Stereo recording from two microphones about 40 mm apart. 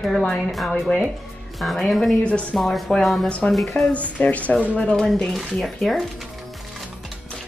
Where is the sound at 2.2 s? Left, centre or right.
Left.